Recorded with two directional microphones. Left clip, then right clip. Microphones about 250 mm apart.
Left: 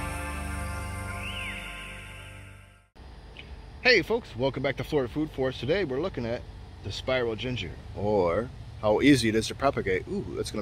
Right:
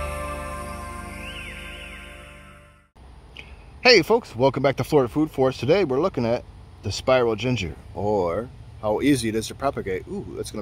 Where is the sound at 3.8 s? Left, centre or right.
Right.